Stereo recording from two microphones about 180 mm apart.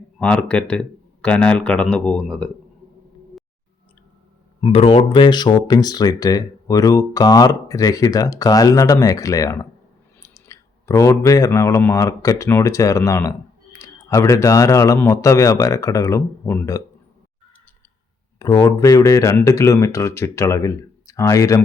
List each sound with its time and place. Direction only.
0.2 s speech: 5° left (ahead or behind)
4.6 s speech: 30° left (ahead or behind); by 16.8 s 15° left (ahead or behind)
18.3 s speech: 20° left (ahead or behind)